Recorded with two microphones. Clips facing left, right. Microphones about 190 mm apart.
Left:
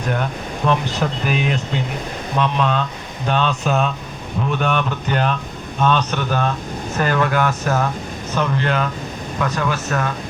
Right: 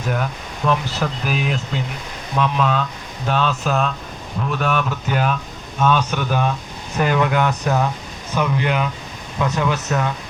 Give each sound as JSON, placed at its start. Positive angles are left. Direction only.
{"t": 0.0, "sound": "speech", "side_deg": -5}